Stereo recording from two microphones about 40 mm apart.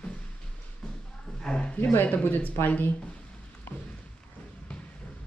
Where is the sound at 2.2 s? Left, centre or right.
Left.